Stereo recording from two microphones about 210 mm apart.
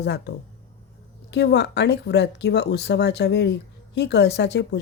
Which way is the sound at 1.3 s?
55° left (ahead or behind).